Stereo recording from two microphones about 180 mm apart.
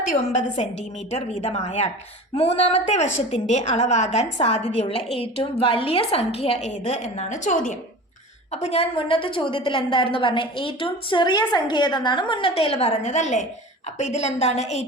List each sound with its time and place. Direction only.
1.4 s a woman's voice: 35° left (ahead or behind)
8.5 s a woman's voice: 35° left (ahead or behind)